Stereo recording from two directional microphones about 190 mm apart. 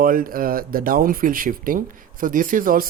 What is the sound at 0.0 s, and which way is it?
Speech, 50° right (ahead or behind).